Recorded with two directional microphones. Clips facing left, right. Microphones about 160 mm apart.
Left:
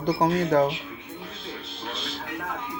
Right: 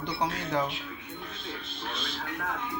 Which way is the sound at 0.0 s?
45° left (ahead or behind).